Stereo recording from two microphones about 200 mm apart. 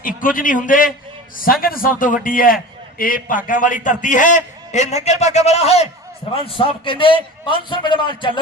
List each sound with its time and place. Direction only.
0.2 s a man's voice: 40° left (ahead or behind); by 8.3 s 25° left (ahead or behind)